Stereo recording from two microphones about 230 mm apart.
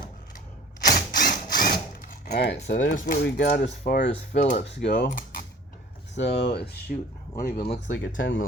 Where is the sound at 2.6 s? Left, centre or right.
Left.